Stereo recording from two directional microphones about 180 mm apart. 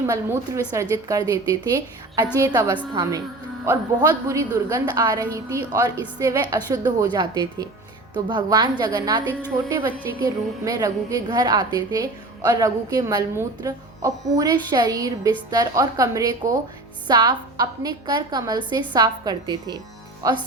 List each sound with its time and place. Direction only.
0.1 s a woman's voice: 15° right (ahead or behind)
4.3 s a woman's voice: 20° right (ahead or behind)